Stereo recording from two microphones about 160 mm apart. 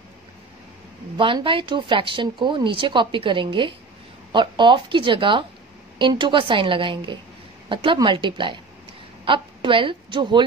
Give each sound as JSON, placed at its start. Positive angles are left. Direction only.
{"t": 1.1, "sound": "a woman's voice", "side_deg": -30}